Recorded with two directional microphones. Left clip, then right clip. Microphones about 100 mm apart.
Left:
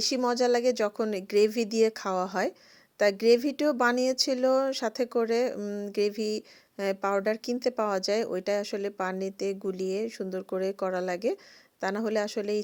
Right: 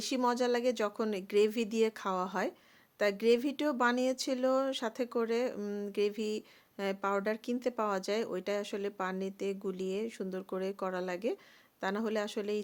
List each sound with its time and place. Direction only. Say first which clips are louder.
0.3 s speech: left 5 dB; 35° left (ahead or behind)
5.5 s speech: left 4 dB; 20° left (ahead or behind)
5.9 s speech: left 5 dB; 35° left (ahead or behind)